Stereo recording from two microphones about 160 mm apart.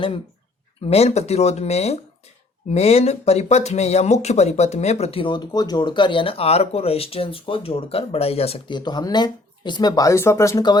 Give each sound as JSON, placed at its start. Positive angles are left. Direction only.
{"t": 0.9, "sound": "speech", "side_deg": 40}